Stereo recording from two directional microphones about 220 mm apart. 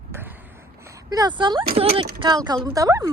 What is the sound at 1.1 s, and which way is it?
A woman's voice, 20° right (ahead or behind).